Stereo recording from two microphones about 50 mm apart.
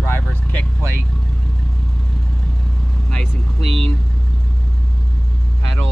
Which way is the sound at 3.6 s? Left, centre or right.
Centre.